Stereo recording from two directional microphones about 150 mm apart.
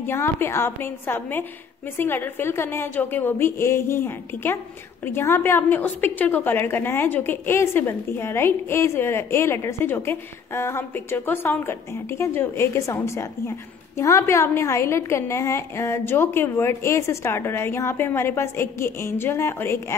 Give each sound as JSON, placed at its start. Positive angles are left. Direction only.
{"t": 0.0, "sound": "a woman's voice", "side_deg": 15}